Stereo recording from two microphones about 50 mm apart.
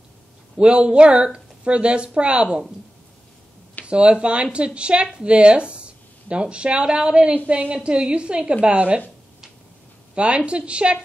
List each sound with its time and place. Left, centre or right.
0.6 s a woman's voice: right
3.8 s a woman's voice: right
10.1 s a woman's voice: right